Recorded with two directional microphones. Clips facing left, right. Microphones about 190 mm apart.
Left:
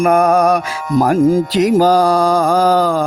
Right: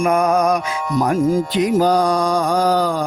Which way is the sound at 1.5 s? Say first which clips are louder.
Left 4 dB; 85° left.